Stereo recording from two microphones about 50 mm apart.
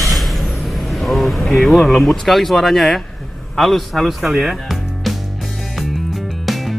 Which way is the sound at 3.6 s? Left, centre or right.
Centre.